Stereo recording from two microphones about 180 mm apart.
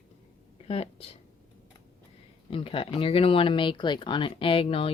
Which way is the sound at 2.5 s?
30° left (ahead or behind).